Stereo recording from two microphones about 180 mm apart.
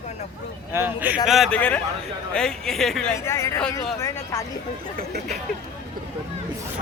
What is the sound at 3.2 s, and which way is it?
Speech, 15° left (ahead or behind).